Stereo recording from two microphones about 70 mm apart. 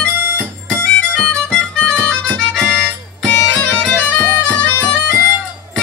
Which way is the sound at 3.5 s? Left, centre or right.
Centre.